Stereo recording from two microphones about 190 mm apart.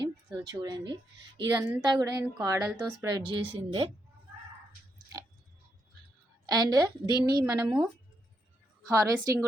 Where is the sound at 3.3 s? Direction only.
25° right (ahead or behind).